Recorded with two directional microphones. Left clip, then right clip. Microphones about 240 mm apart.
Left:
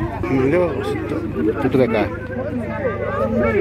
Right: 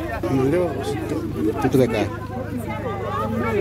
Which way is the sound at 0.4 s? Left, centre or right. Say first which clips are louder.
Left 4 dB; centre.